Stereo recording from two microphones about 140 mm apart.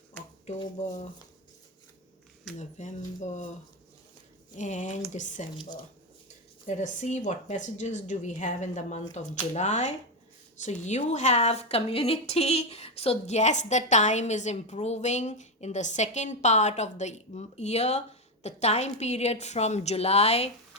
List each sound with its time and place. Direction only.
2.6 s a woman's voice: 60° left (ahead or behind)
4.5 s a woman's voice: 60° left (ahead or behind)
6.7 s a woman's voice: 60° left (ahead or behind)